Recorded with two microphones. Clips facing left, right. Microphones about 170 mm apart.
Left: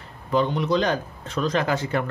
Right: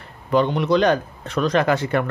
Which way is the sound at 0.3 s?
70° right (ahead or behind).